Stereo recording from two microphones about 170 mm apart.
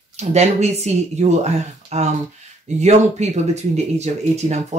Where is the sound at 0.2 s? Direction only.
40° right (ahead or behind).